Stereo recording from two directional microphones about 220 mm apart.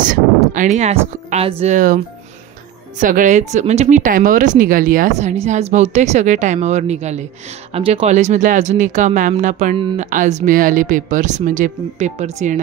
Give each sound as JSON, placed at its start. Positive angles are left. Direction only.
{"t": 0.0, "sound": "a sound", "side_deg": -35}
{"t": 1.6, "sound": "speech", "side_deg": -35}
{"t": 3.0, "sound": "speech", "side_deg": -35}